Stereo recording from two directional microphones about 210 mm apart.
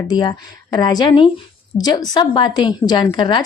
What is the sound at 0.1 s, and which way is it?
A woman's voice, 20° left (ahead or behind).